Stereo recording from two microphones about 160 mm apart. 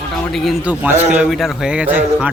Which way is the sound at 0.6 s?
10° right (ahead or behind).